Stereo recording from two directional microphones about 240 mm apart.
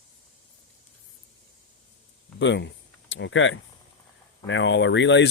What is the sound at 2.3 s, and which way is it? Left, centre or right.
Speech, left.